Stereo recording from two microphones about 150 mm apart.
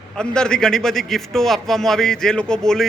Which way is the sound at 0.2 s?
5° left (ahead or behind).